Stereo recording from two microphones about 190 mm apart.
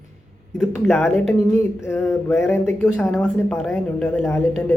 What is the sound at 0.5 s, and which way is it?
Speech, centre (ahead or behind).